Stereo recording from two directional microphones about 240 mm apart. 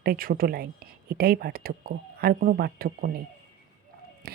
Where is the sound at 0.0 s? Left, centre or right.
Right.